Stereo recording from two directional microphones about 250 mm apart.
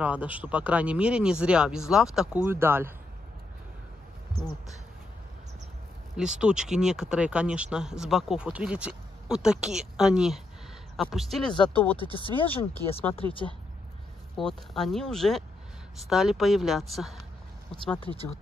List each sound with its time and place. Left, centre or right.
0.0 s speech: centre
6.1 s speech: centre
12.0 s speech: left
13.2 s speech: centre
14.3 s speech: centre